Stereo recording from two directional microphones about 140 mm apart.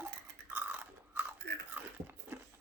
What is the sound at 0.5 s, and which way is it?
Chewing, 15° right (ahead or behind).